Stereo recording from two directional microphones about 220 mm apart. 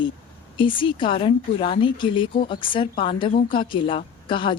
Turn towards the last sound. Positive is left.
turn(degrees=20)  # may be behind; listen again after turning